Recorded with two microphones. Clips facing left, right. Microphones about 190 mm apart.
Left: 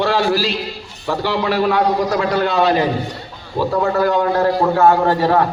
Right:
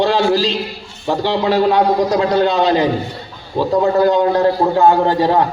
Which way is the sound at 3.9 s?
20° right (ahead or behind).